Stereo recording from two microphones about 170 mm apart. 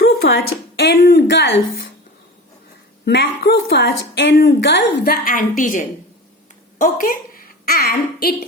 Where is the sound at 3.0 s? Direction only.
75° left (ahead or behind).